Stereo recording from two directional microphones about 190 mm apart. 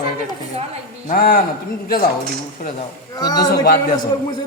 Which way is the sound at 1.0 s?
50° left (ahead or behind).